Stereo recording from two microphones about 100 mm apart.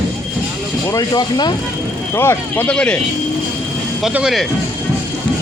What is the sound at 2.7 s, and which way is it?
Speech, 10° left (ahead or behind).